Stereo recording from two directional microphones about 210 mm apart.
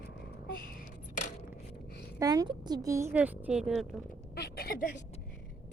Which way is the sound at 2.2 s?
15° right (ahead or behind).